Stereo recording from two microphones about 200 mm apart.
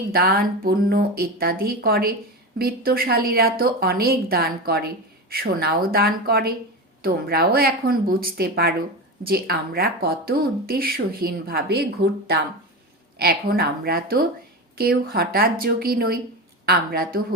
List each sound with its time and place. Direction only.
0.1 s speech: 50° right (ahead or behind)